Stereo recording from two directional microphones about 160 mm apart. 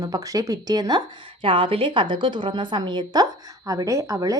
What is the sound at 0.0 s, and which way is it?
A woman's voice, 20° right (ahead or behind).